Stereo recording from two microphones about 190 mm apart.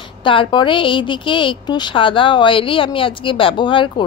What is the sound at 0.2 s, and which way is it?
A woman's voice, 25° left (ahead or behind).